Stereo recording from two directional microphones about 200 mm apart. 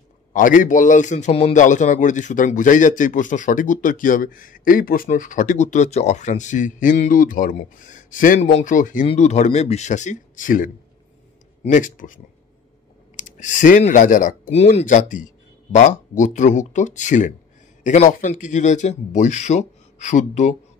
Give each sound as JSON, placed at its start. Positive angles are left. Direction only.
{"t": 0.3, "sound": "a man's voice", "side_deg": 40}